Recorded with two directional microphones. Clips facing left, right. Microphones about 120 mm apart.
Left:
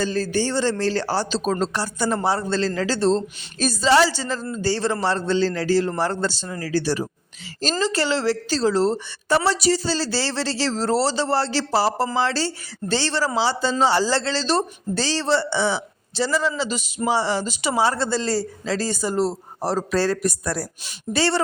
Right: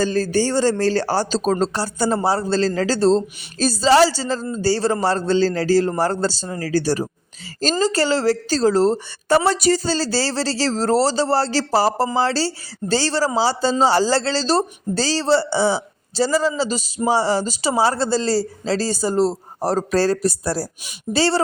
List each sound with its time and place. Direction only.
0.0 s speech: 40° right (ahead or behind)